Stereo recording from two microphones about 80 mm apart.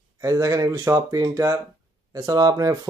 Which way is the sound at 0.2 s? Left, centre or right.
Right.